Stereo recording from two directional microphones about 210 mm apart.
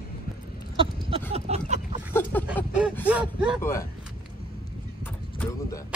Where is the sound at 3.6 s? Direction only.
15° left (ahead or behind).